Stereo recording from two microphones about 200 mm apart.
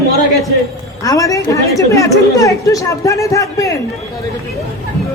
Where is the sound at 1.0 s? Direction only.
15° left (ahead or behind).